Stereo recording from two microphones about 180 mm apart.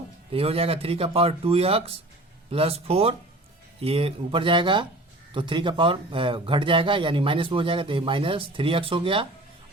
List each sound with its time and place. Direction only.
0.3 s a man's voice: 30° right (ahead or behind)